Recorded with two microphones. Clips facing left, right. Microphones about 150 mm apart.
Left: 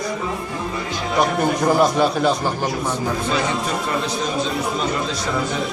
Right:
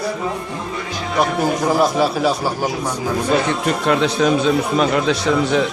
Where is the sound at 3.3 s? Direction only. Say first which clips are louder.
Right 6 dB; 70° right (ahead or behind).